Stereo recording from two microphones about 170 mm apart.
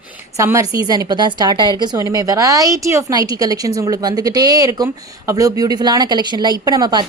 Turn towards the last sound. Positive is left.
turn(degrees=-25)  # may be behind; listen again after turning